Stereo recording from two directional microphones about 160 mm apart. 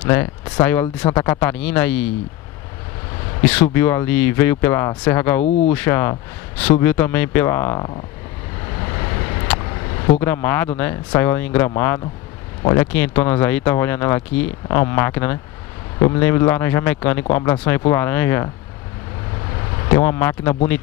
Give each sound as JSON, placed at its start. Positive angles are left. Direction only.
{"t": 0.6, "sound": "speech", "side_deg": 10}
{"t": 3.4, "sound": "speech", "side_deg": 10}
{"t": 8.8, "sound": "vehicle", "side_deg": 25}
{"t": 10.2, "sound": "speech", "side_deg": 15}
{"t": 19.9, "sound": "speech", "side_deg": 15}